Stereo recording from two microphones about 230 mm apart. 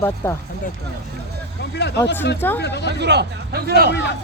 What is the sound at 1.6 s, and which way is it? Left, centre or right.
Speech, left.